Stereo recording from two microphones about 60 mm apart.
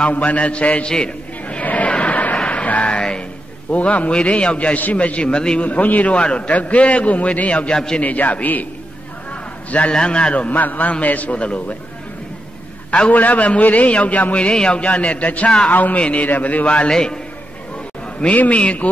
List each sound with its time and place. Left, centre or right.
0.1 s a man's voice: left
1.6 s music: left
3.7 s a man's voice: left
8.0 s a man's voice: left
12.9 s a man's voice: left
18.2 s a man's voice: left